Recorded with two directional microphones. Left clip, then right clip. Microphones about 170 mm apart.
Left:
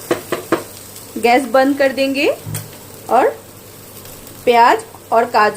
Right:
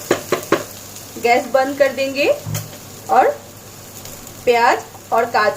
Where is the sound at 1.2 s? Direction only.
55° left (ahead or behind); by 2.3 s 40° left (ahead or behind).